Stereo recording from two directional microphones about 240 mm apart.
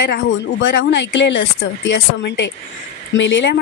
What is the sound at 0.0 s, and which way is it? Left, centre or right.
Speech, left.